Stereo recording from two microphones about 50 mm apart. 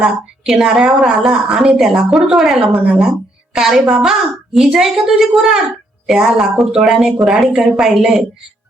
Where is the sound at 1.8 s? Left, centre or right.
Centre.